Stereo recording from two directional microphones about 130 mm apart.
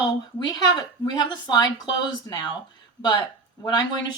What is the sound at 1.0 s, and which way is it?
Speech, 35° left (ahead or behind).